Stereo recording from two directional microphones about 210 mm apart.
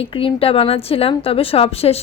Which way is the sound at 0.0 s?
25° left (ahead or behind).